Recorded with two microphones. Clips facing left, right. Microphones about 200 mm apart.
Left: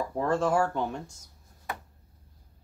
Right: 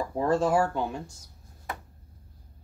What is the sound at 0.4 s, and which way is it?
Speech, 10° right (ahead or behind).